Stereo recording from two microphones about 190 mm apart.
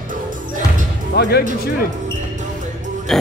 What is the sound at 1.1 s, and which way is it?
Speech, 60° left (ahead or behind).